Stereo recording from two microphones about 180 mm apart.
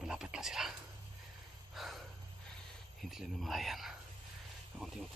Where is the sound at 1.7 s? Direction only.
Centre (ahead or behind).